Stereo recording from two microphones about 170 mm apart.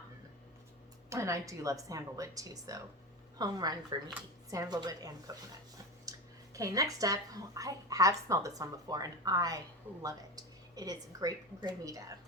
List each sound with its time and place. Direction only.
1.1 s speech: 15° right (ahead or behind)